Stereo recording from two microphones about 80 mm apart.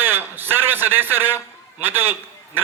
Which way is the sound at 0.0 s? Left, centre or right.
Right.